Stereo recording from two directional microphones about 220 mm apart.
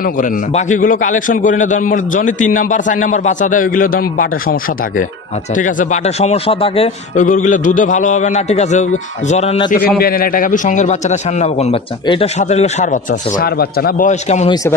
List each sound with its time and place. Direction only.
0.0 s a man's voice: 35° left (ahead or behind)
9.8 s a man's voice: 45° left (ahead or behind)